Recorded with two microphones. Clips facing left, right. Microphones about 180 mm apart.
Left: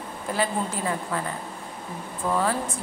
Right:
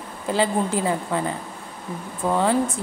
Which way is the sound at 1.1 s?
25° right (ahead or behind).